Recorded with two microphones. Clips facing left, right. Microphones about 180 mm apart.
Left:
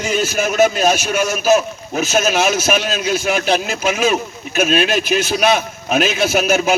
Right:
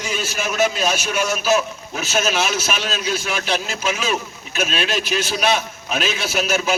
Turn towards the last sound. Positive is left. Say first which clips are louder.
# left 5 dB
turn(degrees=50)  # may be behind; listen again after turning